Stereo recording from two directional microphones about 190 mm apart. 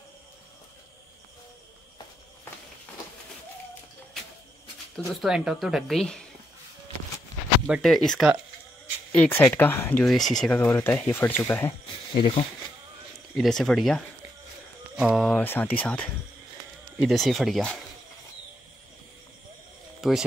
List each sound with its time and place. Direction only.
4.9 s speech: centre (ahead or behind)
7.6 s speech: centre (ahead or behind)
12.2 s speech: 25° left (ahead or behind)
13.4 s speech: centre (ahead or behind)
17.0 s speech: centre (ahead or behind)
20.0 s speech: centre (ahead or behind)